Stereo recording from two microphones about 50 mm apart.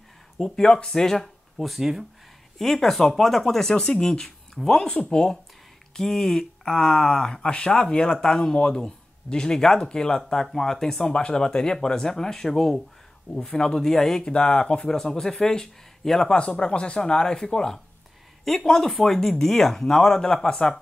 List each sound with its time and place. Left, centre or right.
0.4 s speech: centre
2.6 s speech: centre
14.3 s speech: left
16.3 s speech: left